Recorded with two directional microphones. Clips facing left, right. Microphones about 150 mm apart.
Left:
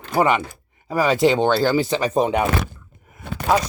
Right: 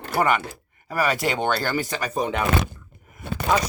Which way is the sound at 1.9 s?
30° left (ahead or behind).